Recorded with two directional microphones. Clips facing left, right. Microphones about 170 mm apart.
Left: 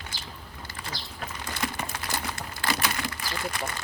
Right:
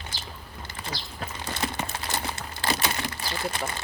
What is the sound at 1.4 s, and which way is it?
Crumpling, 25° right (ahead or behind).